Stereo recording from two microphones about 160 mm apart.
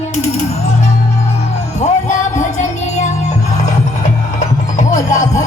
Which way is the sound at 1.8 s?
50° left (ahead or behind).